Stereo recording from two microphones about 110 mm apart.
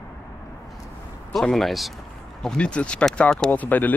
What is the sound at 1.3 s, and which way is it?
Speech, centre (ahead or behind).